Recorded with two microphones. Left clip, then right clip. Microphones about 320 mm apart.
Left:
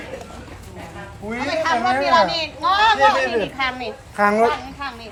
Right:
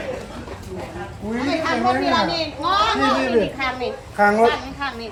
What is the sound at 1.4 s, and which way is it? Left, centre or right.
A woman's voice, left.